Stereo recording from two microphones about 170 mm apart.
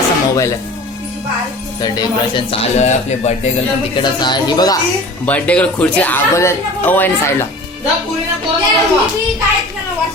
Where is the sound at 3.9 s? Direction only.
25° left (ahead or behind).